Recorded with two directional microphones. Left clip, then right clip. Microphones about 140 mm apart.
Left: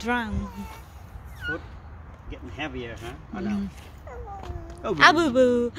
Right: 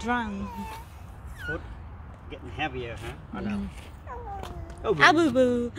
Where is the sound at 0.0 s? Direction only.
35° left (ahead or behind).